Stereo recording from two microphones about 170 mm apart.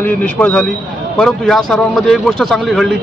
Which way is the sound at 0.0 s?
10° left (ahead or behind).